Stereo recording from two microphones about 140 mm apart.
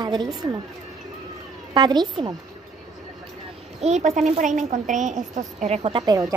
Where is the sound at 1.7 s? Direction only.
30° right (ahead or behind).